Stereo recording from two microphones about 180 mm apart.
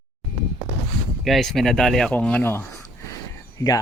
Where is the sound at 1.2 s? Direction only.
Centre (ahead or behind).